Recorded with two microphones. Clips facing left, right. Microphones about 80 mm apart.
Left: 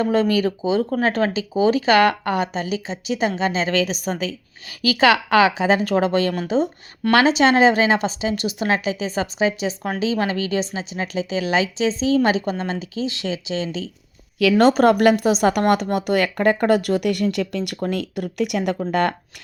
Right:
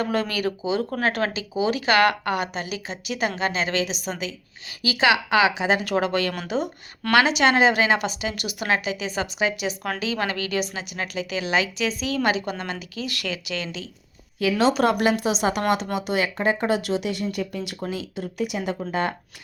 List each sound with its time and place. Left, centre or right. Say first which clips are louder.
0.0 s a woman's voice: left 6 dB; left
14.6 s speech: left 5 dB; left
17.3 s speech: left 5 dB; left
17.8 s speech: left 5 dB; left